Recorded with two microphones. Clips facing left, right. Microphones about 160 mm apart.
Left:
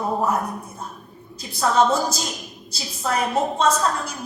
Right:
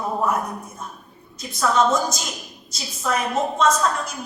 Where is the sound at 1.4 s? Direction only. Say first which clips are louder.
Left 1 dB; 30° left (ahead or behind).